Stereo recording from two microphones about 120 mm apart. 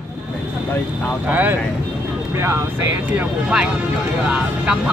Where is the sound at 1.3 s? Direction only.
15° right (ahead or behind).